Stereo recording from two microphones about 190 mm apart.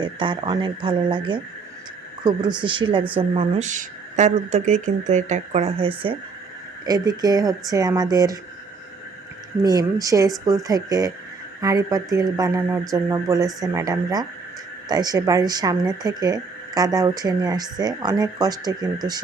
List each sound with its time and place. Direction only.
0.0 s speech: 25° right (ahead or behind)
2.6 s speech: 25° right (ahead or behind)
9.6 s speech: 20° right (ahead or behind)